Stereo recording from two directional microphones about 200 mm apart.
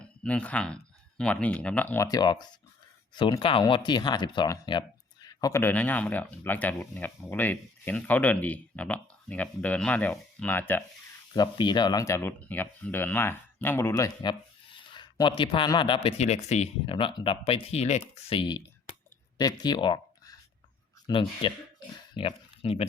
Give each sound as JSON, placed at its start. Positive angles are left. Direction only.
{"t": 0.0, "sound": "speech", "side_deg": 5}
{"t": 11.3, "sound": "speech", "side_deg": 20}